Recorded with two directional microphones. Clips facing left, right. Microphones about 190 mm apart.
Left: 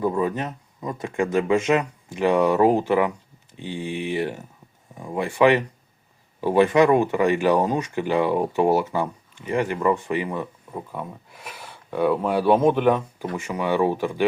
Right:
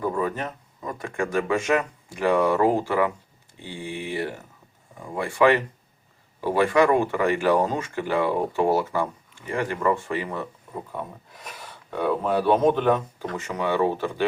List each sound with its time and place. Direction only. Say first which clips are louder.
0.0 s speech: left 3 dB; 20° left (ahead or behind)